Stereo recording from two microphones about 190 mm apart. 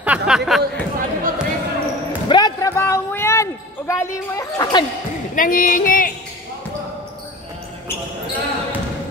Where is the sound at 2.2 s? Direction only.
20° left (ahead or behind).